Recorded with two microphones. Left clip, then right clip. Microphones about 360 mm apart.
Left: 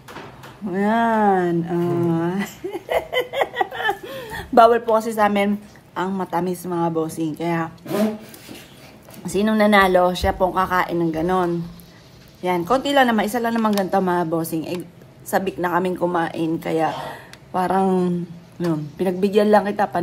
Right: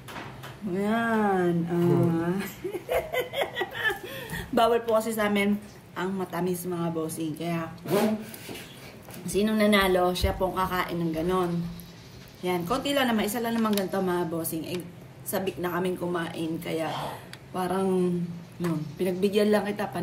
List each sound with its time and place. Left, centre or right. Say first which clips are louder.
0.7 s a sound: left 8 dB; left
5.9 s speech: left 8 dB; centre
9.2 s speech: left 6 dB; centre
12.4 s speech: left 8 dB; centre